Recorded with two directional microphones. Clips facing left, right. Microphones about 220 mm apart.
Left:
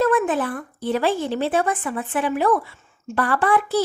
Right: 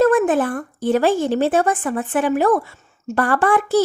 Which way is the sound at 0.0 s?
45° right (ahead or behind).